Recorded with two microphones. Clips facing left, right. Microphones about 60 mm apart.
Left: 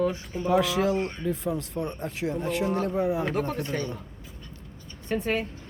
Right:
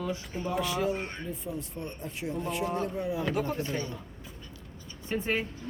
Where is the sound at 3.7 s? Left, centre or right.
Left.